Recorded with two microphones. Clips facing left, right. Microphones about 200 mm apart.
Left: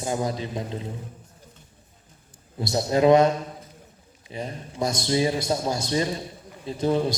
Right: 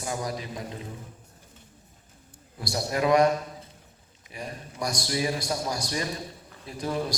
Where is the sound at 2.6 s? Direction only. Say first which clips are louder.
Left 6 dB; 25° left (ahead or behind).